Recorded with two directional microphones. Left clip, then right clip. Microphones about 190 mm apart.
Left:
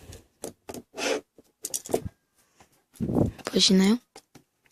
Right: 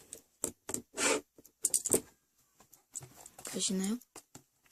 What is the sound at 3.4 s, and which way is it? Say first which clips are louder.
Speech: left 13 dB; 50° left (ahead or behind).